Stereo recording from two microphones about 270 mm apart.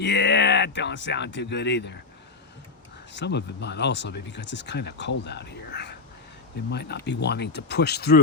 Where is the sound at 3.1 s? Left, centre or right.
Left.